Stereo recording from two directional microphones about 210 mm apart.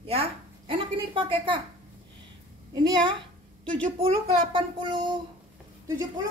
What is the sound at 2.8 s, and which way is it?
A woman's voice, 20° right (ahead or behind).